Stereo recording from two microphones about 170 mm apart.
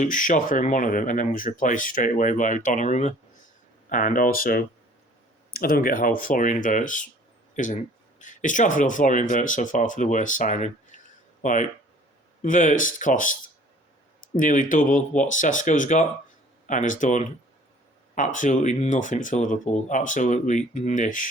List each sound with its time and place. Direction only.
0.0 s speech: 50° left (ahead or behind)
14.3 s speech: 50° left (ahead or behind)